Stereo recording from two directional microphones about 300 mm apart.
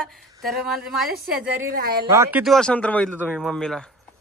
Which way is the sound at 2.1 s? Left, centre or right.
Centre.